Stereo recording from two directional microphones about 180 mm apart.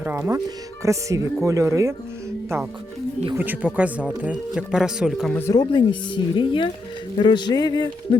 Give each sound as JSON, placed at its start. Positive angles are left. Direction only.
{"t": 0.0, "sound": "speech", "side_deg": -10}
{"t": 3.3, "sound": "speech", "side_deg": -10}
{"t": 5.3, "sound": "speech", "side_deg": 15}